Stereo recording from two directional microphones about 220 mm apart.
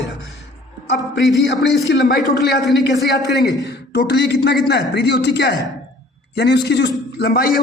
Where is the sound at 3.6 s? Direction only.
50° left (ahead or behind).